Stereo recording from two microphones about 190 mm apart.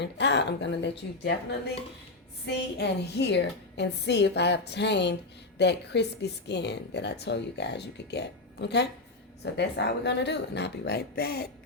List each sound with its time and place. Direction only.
0.0 s speech: 65° left (ahead or behind)
2.7 s speech: 60° left (ahead or behind)